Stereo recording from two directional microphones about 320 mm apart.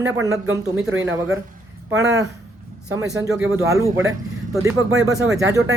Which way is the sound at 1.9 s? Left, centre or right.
Centre.